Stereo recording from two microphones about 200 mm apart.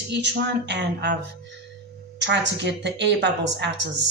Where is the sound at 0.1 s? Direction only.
60° right (ahead or behind).